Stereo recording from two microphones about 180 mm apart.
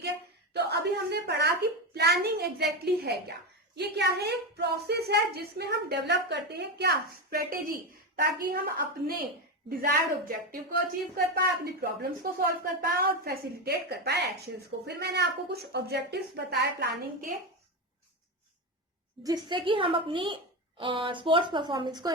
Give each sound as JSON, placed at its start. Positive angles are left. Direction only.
{"t": 0.5, "sound": "a woman's voice", "side_deg": -70}
{"t": 19.2, "sound": "a woman's voice", "side_deg": -20}